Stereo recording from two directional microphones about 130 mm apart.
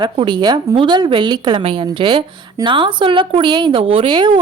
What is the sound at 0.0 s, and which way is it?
A woman's voice, 35° right (ahead or behind).